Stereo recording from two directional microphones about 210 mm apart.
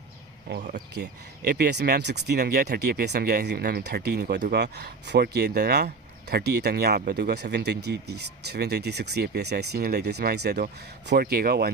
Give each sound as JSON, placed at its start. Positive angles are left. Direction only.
{"t": 1.5, "sound": "speech", "side_deg": -50}